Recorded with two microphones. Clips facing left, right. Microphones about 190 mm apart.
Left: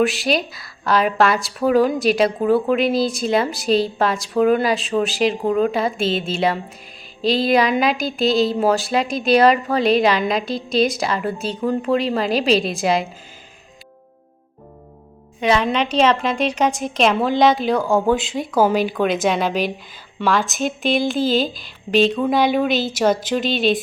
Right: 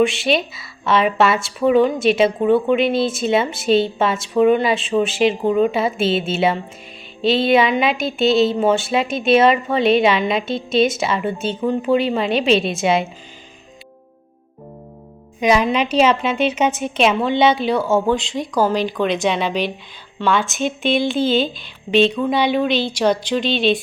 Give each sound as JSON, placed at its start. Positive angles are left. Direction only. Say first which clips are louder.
{"t": 0.0, "sound": "speech", "louder": "right 2 dB", "side_deg": 0}
{"t": 15.4, "sound": "speech", "louder": "right 2 dB", "side_deg": -10}